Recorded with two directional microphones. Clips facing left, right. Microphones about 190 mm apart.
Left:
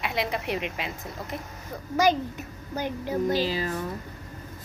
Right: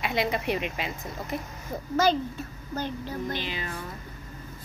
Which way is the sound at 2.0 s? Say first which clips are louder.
Left 1 dB; 15° left (ahead or behind).